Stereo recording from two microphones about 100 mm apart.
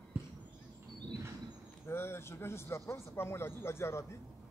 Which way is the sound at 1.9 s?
25° left (ahead or behind).